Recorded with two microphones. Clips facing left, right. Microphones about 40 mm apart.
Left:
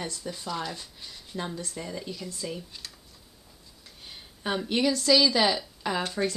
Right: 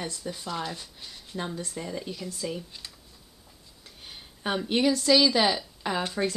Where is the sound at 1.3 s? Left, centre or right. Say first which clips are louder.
Right 1 dB; centre.